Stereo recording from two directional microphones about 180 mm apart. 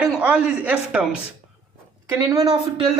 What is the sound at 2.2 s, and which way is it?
Speech, 20° right (ahead or behind).